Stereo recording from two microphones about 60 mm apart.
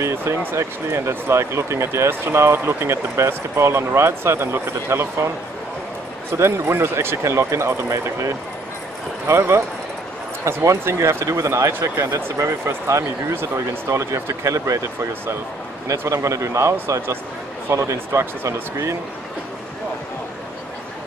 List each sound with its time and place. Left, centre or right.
0.0 s speech: right
6.3 s a man's voice: right
17.7 s speech: right